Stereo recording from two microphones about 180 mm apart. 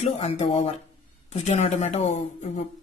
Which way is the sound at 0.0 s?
35° left (ahead or behind).